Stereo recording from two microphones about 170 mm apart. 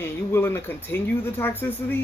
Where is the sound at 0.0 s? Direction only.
15° left (ahead or behind).